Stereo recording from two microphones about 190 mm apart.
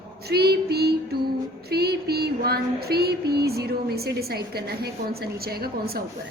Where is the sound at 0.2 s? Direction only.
55° right (ahead or behind).